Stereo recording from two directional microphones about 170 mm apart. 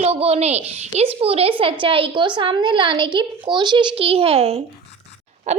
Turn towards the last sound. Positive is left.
turn(degrees=-40)  # may be behind; listen again after turning